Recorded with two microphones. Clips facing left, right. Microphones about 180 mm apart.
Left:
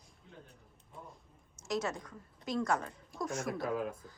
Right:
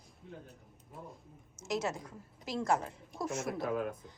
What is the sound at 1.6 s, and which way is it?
Speech, centre (ahead or behind).